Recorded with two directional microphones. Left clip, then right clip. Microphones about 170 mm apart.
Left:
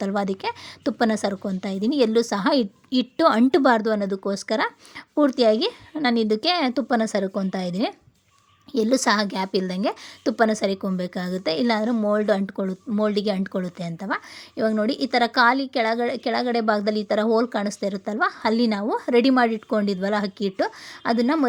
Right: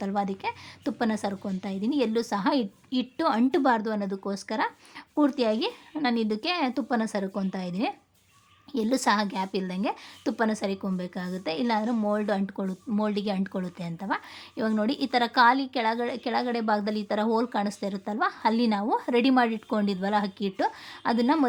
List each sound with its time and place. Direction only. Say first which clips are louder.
0.0 s a woman's voice: left 4 dB; 30° left (ahead or behind)